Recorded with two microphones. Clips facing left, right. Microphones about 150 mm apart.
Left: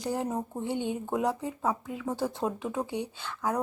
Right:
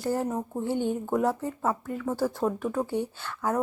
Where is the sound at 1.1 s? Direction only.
Centre (ahead or behind).